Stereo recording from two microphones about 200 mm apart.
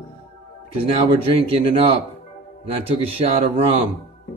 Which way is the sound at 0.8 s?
30° right (ahead or behind).